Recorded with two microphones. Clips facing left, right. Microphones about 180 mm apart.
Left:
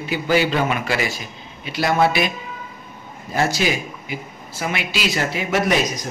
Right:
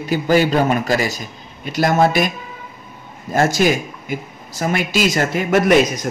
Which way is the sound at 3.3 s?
50° right (ahead or behind).